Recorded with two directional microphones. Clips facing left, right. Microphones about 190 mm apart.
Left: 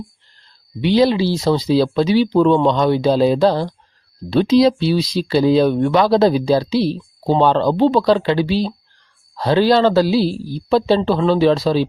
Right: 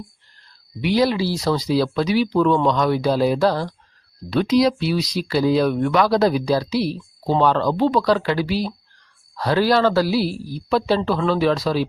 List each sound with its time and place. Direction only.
0.8 s speech: 25° left (ahead or behind)